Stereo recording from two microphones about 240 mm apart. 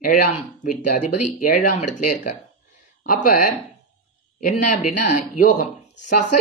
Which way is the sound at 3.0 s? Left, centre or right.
Left.